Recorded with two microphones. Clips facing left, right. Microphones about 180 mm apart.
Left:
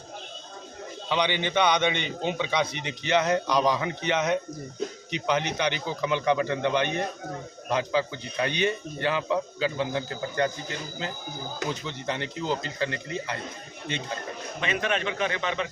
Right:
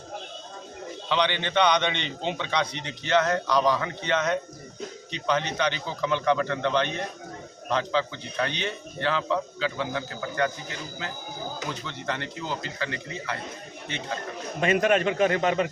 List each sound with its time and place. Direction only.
1.1 s a man's voice: 15° left (ahead or behind)
11.9 s a man's voice: 15° left (ahead or behind)
14.6 s a man's voice: 45° right (ahead or behind)